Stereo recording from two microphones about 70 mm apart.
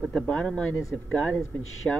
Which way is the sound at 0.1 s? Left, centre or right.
Centre.